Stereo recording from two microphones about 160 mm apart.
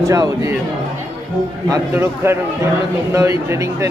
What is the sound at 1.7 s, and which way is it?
A man's voice, 15° right (ahead or behind).